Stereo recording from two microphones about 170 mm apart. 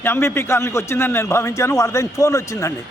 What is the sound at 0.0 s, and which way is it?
A man's voice, 15° left (ahead or behind).